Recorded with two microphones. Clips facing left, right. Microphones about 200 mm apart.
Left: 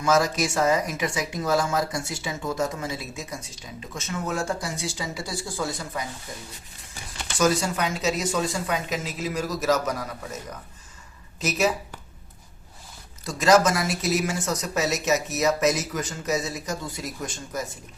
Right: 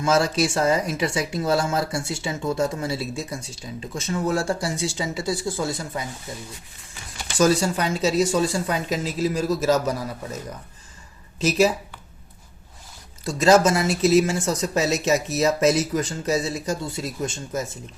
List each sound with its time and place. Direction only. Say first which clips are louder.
0.0 s speech: right 2 dB; 30° right (ahead or behind)
7.3 s speech: right 3 dB; 30° right (ahead or behind)
11.3 s speech: right 5 dB; 30° right (ahead or behind)
13.2 s speech: right 2 dB; 25° right (ahead or behind)